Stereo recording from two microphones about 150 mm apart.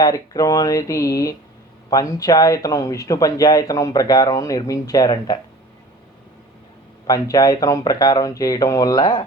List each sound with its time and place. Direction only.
0.0 s speech: 25° left (ahead or behind)
7.1 s speech: 25° left (ahead or behind)